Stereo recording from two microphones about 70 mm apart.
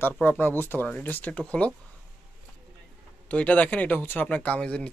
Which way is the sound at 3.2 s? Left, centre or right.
Centre.